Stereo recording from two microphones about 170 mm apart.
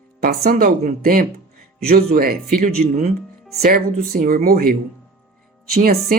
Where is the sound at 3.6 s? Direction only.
60° right (ahead or behind).